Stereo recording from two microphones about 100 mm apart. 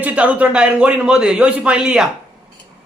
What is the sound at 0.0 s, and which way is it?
Speech, 15° right (ahead or behind).